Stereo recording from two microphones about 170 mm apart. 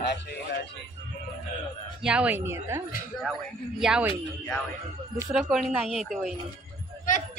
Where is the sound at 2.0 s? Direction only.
5° right (ahead or behind).